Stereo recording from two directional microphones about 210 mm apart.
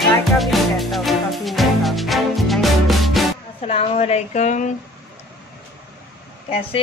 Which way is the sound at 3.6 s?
30° left (ahead or behind).